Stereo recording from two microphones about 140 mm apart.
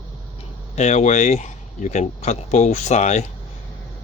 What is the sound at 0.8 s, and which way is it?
Speech, 55° left (ahead or behind).